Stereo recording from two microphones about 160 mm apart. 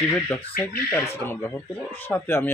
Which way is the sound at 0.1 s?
15° left (ahead or behind).